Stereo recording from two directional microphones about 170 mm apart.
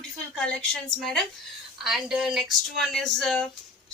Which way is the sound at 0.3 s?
5° left (ahead or behind).